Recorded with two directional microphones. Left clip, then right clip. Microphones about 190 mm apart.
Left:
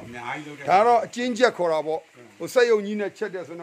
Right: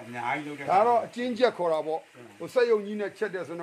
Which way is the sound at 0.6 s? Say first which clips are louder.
Left 5 dB; 45° left (ahead or behind).